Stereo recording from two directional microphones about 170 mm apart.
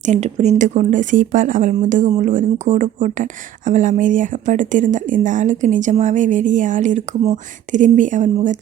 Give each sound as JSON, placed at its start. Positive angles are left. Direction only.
{"t": 0.0, "sound": "speech", "side_deg": -40}